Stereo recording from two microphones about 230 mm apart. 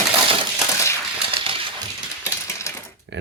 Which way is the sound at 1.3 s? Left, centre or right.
Right.